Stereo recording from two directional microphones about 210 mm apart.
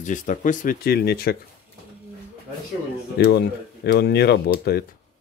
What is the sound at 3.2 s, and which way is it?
Speech, 50° left (ahead or behind).